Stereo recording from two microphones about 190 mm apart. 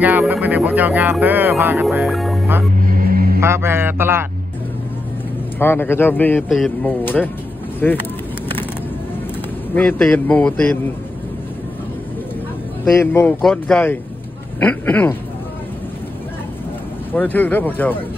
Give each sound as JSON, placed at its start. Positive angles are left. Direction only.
{"t": 0.0, "sound": "speech", "side_deg": -10}
{"t": 2.8, "sound": "vehicle", "side_deg": -50}
{"t": 3.3, "sound": "speech", "side_deg": -15}
{"t": 5.6, "sound": "speech", "side_deg": 10}
{"t": 9.8, "sound": "speech", "side_deg": 5}
{"t": 13.0, "sound": "speech", "side_deg": 10}
{"t": 17.1, "sound": "speech", "side_deg": 10}